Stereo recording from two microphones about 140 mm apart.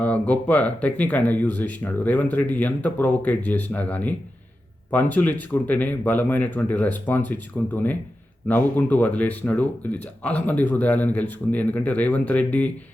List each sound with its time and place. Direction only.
0.0 s speech: 10° left (ahead or behind)